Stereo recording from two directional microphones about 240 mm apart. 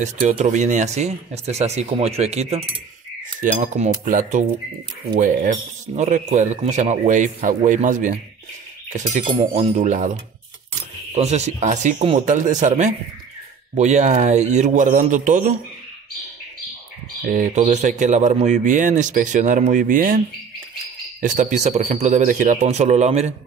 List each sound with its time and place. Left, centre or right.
0.0 s speech: right
11.1 s speech: right
17.3 s speech: right
21.2 s speech: right